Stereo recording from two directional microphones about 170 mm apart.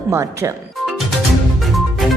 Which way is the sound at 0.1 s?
15° right (ahead or behind).